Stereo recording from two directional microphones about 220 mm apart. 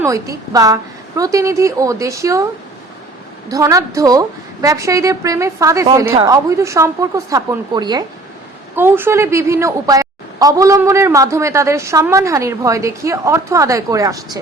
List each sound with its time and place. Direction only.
0.0 s a woman's voice: 15° right (ahead or behind)
3.5 s a woman's voice: 15° right (ahead or behind)